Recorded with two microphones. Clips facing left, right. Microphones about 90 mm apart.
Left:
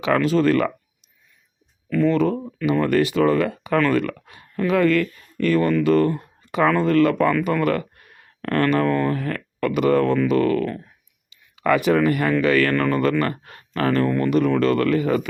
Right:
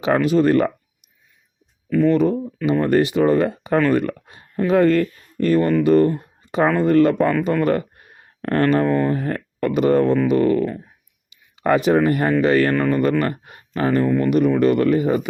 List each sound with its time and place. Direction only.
0.3 s speech: 25° right (ahead or behind)
1.9 s speech: 10° right (ahead or behind)
2.8 s speech: 25° right (ahead or behind)
12.7 s speech: 15° right (ahead or behind)